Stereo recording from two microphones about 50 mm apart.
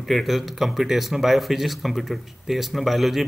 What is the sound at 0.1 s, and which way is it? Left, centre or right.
A man's voice, centre.